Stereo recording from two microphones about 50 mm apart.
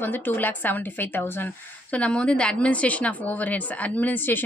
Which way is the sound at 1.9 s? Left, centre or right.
Left.